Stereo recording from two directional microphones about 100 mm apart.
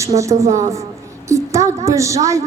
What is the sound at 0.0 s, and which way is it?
A woman's voice, 30° right (ahead or behind).